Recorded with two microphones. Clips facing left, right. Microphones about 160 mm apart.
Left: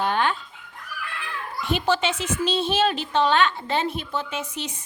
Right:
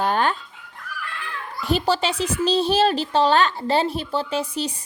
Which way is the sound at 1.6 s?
35° right (ahead or behind).